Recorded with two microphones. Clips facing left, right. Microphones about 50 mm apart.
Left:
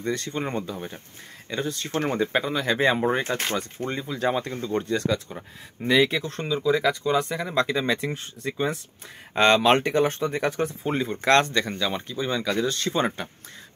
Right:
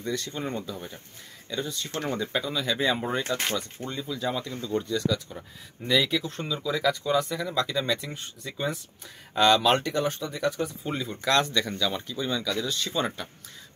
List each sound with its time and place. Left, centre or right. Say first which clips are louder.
0.0 s speech: left 3 dB; left
1.5 s speech: left 4 dB; left
5.9 s speech: left 4 dB; left
12.6 s speech: left 4 dB; left